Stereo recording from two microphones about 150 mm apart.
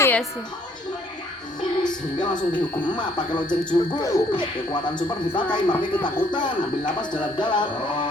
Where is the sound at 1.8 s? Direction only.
30° left (ahead or behind).